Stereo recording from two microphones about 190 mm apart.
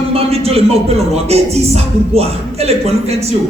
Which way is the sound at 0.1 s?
30° right (ahead or behind).